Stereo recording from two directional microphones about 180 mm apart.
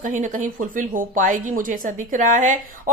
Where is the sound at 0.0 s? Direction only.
45° right (ahead or behind).